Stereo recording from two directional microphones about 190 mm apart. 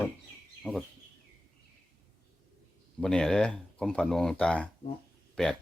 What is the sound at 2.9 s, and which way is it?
Speech, 5° left (ahead or behind).